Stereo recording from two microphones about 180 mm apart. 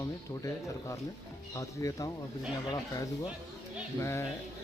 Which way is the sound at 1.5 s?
20° left (ahead or behind).